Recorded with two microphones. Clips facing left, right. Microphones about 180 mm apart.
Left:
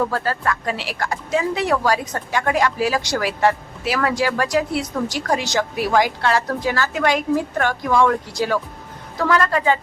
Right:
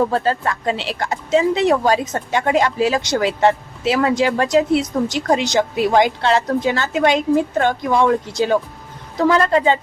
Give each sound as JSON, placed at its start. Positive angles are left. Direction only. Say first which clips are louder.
{"t": 0.0, "sound": "speech", "louder": "right 4 dB", "side_deg": -25}